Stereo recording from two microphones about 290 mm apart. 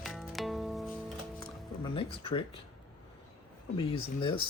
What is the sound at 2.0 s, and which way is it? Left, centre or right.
Speech, centre.